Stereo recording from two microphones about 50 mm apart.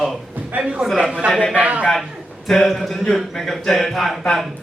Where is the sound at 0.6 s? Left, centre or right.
Centre.